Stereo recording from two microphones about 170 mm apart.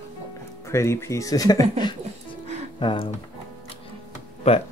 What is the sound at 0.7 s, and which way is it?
Speech, 15° left (ahead or behind).